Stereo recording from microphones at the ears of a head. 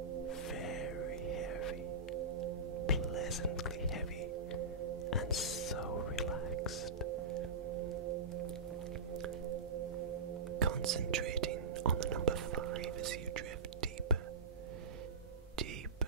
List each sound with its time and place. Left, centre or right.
1.0 s music: right
7.1 s singing bowl: right
10.5 s whispering: right